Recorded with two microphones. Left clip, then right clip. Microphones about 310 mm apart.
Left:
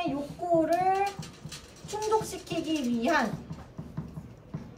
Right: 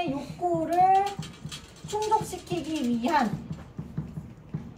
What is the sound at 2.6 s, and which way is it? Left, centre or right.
Speech, right.